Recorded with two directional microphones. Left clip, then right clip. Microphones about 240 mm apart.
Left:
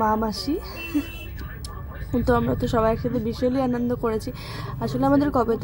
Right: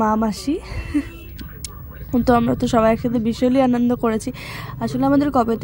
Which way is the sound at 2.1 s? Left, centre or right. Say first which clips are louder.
Right 5 dB; right.